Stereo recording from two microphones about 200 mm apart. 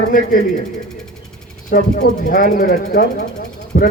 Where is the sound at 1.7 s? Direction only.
50° left (ahead or behind).